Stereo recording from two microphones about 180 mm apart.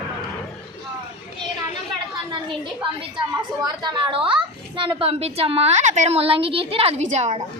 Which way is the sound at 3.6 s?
25° right (ahead or behind).